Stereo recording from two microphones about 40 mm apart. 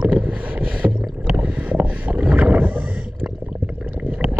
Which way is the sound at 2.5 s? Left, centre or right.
Right.